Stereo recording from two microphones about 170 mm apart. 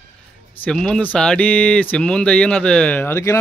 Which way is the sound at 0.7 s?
5° left (ahead or behind).